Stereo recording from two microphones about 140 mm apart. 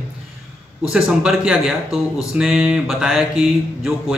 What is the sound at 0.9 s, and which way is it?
Mantra, 5° right (ahead or behind).